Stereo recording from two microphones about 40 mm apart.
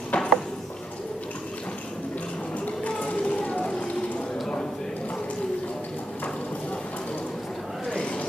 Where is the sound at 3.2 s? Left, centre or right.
Left.